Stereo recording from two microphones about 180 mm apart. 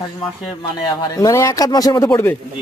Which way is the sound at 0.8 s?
20° left (ahead or behind).